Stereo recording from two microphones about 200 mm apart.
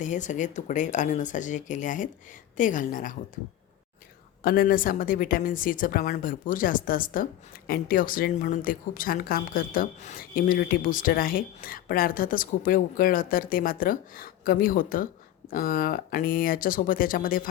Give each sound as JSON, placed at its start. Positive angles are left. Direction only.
{"t": 0.0, "sound": "speech", "side_deg": 40}
{"t": 4.4, "sound": "speech", "side_deg": 45}